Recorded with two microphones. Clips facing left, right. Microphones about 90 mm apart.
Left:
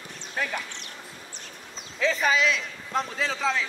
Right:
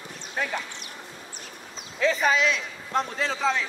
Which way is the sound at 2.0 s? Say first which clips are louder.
Right 1 dB; centre (ahead or behind).